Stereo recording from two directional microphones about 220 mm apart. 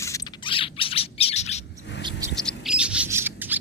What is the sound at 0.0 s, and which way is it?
Chirp, 15° left (ahead or behind).